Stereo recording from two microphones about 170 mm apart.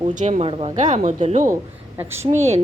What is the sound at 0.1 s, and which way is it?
Speech, 45° right (ahead or behind).